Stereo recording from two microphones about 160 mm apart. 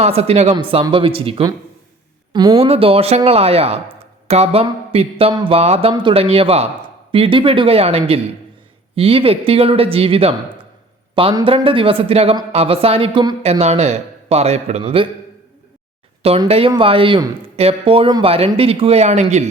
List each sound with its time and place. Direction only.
0.0 s speech: 40° right (ahead or behind)
2.6 s speech: 35° right (ahead or behind)
16.5 s speech: 35° right (ahead or behind)